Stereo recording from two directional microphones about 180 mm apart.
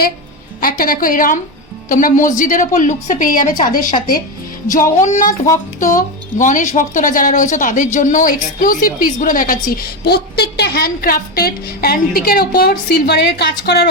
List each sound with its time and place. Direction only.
0.6 s speech: 55° left (ahead or behind)
4.7 s speech: 45° left (ahead or behind); by 13.8 s 65° left (ahead or behind)